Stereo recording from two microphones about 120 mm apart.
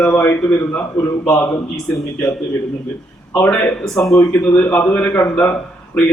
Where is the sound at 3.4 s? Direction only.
15° left (ahead or behind).